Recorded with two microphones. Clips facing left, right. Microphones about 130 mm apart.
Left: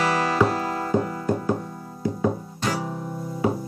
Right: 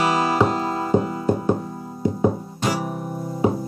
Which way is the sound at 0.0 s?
20° right (ahead or behind).